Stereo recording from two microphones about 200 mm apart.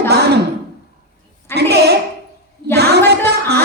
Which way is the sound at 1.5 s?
55° right (ahead or behind).